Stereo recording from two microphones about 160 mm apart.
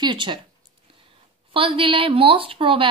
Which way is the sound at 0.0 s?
30° right (ahead or behind).